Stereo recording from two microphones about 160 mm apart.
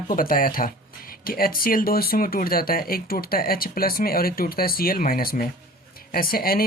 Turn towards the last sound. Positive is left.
turn(degrees=65)  # may be behind; listen again after turning